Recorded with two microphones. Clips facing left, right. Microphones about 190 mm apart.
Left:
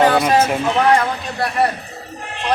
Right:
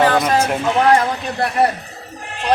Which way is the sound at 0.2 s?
5° left (ahead or behind).